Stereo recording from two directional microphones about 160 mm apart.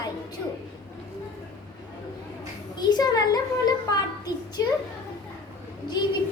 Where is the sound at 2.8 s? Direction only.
25° left (ahead or behind).